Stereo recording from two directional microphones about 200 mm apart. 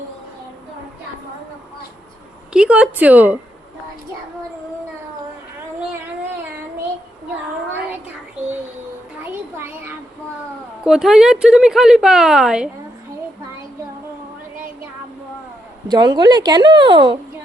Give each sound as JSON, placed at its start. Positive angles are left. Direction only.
{"t": 2.5, "sound": "a woman's voice", "side_deg": -5}
{"t": 10.8, "sound": "a woman's voice", "side_deg": 0}
{"t": 15.9, "sound": "a woman's voice", "side_deg": -20}